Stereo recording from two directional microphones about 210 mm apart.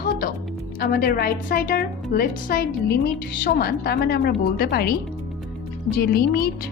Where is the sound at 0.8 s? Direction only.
45° left (ahead or behind).